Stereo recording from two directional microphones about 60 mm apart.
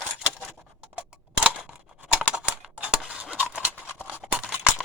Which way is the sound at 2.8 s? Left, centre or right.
Centre.